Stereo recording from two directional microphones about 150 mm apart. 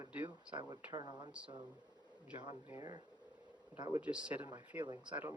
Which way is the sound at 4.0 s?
5° right (ahead or behind).